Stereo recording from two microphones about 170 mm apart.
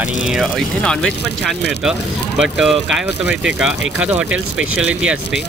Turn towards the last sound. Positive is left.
turn(degrees=-5)  # may be behind; listen again after turning